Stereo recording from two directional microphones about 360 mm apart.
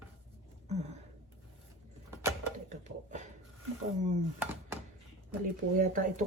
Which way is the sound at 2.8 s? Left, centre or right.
Centre.